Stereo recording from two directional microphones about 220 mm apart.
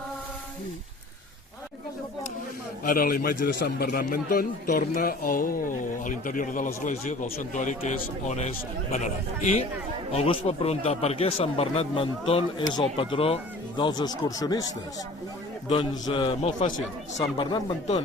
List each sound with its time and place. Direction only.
2.8 s a man's voice: 40° left (ahead or behind); by 14.7 s 15° left (ahead or behind)
15.7 s speech: 20° left (ahead or behind)